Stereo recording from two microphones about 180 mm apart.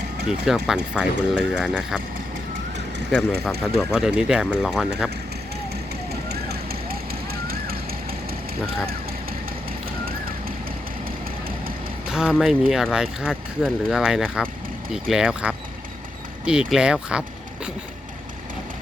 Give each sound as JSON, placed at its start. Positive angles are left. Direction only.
{"t": 0.3, "sound": "speech", "side_deg": -5}
{"t": 3.8, "sound": "speech", "side_deg": 0}
{"t": 6.2, "sound": "a sound", "side_deg": -60}
{"t": 12.0, "sound": "speech", "side_deg": -5}